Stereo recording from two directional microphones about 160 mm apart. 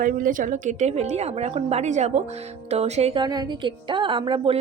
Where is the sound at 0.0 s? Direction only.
60° right (ahead or behind); by 3.2 s 40° right (ahead or behind).